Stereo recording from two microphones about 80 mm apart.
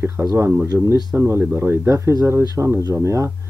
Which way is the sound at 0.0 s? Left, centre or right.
Right.